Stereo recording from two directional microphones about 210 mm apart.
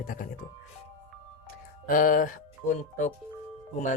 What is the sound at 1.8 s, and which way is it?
Speech, 40° left (ahead or behind).